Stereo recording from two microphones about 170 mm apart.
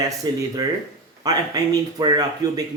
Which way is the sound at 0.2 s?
25° right (ahead or behind).